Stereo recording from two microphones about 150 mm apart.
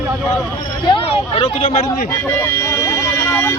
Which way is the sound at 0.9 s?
40° left (ahead or behind).